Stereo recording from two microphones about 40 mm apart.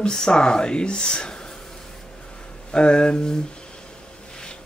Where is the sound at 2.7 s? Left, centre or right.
Left.